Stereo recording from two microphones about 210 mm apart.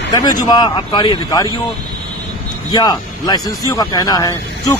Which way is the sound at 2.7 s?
20° left (ahead or behind).